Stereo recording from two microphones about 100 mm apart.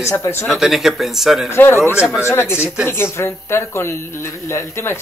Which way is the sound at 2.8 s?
25° left (ahead or behind).